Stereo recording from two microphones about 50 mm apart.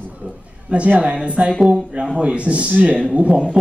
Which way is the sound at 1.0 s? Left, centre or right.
Right.